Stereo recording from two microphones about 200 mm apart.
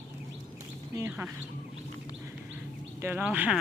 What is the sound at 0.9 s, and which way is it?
Bird, 10° right (ahead or behind).